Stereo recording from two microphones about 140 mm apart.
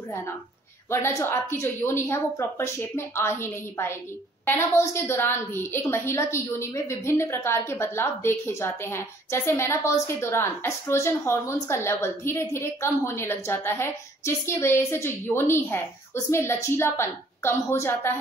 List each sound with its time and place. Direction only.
0.8 s a woman's voice: 15° left (ahead or behind)